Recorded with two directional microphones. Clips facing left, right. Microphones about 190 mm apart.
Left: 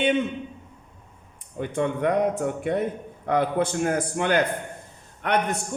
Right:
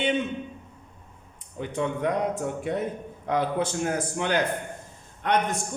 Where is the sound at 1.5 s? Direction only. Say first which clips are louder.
Left 3 dB; 55° left (ahead or behind).